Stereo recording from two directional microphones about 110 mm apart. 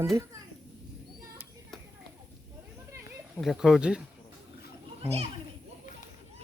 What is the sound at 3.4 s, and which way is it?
Speech, centre (ahead or behind).